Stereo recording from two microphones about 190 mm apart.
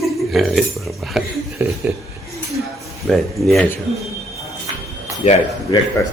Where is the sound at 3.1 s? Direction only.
Centre (ahead or behind).